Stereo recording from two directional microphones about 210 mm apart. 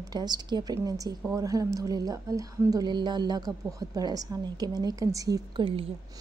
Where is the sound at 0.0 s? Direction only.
20° right (ahead or behind).